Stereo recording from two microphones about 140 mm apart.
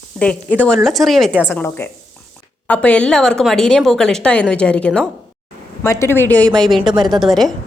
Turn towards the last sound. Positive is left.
turn(degrees=0)  # may be behind; listen again after turning